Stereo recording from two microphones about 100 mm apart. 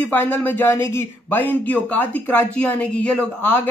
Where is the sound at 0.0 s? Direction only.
20° left (ahead or behind).